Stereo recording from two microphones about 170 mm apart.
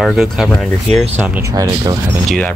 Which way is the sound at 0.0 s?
Centre (ahead or behind).